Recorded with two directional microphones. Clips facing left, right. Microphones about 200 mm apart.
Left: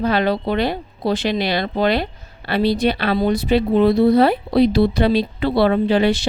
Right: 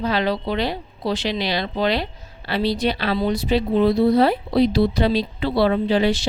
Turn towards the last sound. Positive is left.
turn(degrees=60)  # may be behind; listen again after turning